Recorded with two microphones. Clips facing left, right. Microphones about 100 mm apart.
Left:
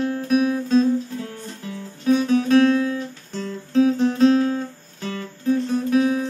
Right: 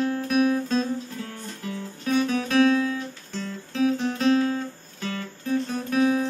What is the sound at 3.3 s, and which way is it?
Music, 40° left (ahead or behind).